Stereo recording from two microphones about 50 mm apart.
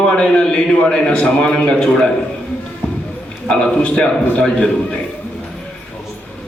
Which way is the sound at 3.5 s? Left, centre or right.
Centre.